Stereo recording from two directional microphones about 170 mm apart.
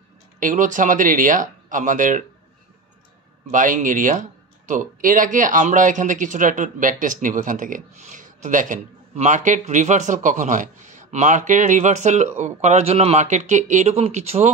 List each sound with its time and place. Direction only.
0.4 s speech: 50° right (ahead or behind)
3.5 s speech: 50° right (ahead or behind)